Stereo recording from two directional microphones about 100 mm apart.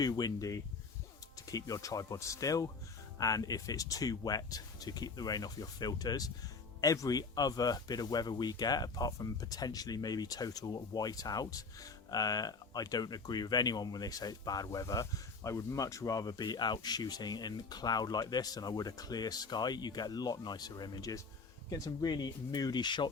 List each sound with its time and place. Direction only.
0.0 s speech: 40° left (ahead or behind)